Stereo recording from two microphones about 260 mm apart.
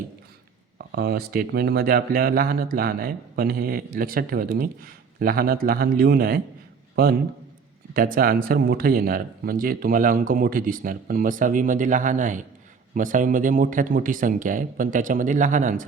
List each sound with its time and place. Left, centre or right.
0.8 s a man's voice: right